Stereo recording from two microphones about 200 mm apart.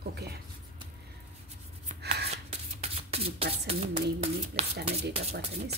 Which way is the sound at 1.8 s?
30° right (ahead or behind).